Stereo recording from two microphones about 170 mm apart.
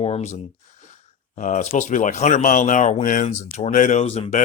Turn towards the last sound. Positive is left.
turn(degrees=40)  # may be behind; listen again after turning